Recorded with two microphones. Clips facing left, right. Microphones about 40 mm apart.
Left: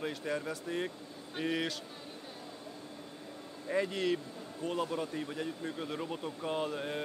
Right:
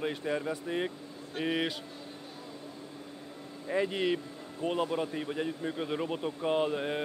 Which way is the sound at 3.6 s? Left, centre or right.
Centre.